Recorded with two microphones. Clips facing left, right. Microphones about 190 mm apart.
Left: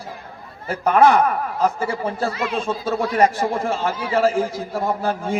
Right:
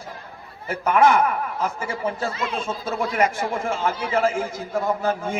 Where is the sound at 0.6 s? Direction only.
35° left (ahead or behind).